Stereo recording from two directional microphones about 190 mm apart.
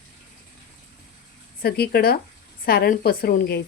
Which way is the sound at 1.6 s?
55° left (ahead or behind).